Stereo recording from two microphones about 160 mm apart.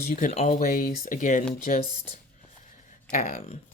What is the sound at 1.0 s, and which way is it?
Speech, 55° left (ahead or behind).